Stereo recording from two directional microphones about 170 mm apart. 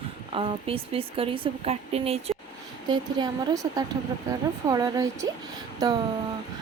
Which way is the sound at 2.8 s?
25° right (ahead or behind).